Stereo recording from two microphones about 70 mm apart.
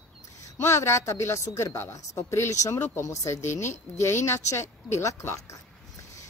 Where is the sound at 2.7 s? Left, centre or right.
Left.